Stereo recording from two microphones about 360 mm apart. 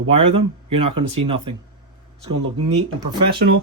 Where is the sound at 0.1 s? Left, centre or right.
Centre.